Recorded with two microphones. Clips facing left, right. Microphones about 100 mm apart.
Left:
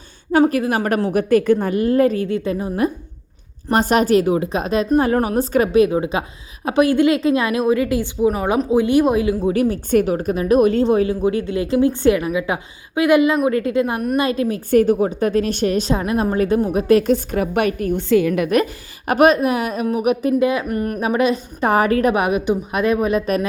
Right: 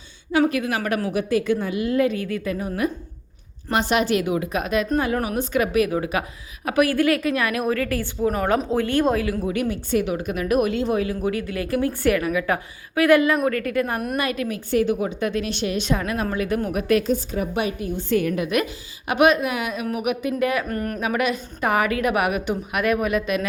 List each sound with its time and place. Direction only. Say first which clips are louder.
0.3 s a woman's voice: left 5 dB; 40° left (ahead or behind)
1.1 s a woman's voice: left 8 dB; 50° left (ahead or behind); by 2.9 s 30° left (ahead or behind)
3.7 s a woman's voice: left 5 dB; 40° left (ahead or behind); by 9.5 s 20° left (ahead or behind)
9.5 s a woman's voice: left 6 dB; 35° left (ahead or behind)
14.7 s a woman's voice: left 6 dB; 45° left (ahead or behind); by 16.3 s 25° left (ahead or behind)
16.3 s a woman's voice: left 7 dB; 40° left (ahead or behind)
17.1 s a woman's voice: left 5 dB; 85° left; by 18.4 s 60° left (ahead or behind)
18.4 s a woman's voice: left 5 dB; 40° left (ahead or behind)
20.4 s a woman's voice: left 4 dB; 20° left (ahead or behind)
21.0 s a woman's voice: left 6 dB; 30° left (ahead or behind)